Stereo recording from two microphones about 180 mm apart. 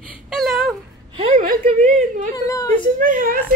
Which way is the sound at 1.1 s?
35° right (ahead or behind).